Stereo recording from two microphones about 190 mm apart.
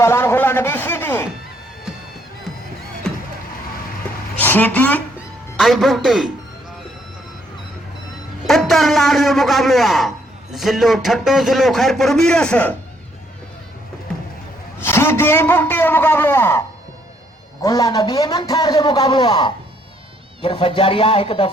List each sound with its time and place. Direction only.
0.0 s a man's voice: 15° left (ahead or behind)
3.1 s vehicle: 5° left (ahead or behind)
4.4 s a man's voice: 10° left (ahead or behind)
8.4 s a man's voice: centre (ahead or behind)
14.8 s a man's voice: 15° left (ahead or behind); by 21.5 s 30° left (ahead or behind)